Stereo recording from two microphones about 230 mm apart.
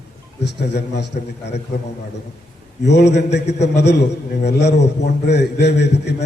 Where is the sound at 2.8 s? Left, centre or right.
Left.